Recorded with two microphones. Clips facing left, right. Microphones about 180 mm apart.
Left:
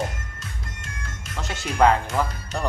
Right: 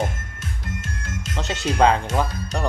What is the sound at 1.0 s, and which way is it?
Music, 90° right.